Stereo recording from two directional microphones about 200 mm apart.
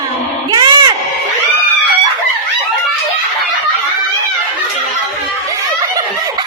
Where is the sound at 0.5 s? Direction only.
20° right (ahead or behind).